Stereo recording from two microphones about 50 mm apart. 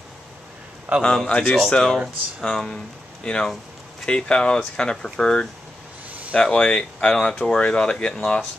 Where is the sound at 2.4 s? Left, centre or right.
Centre.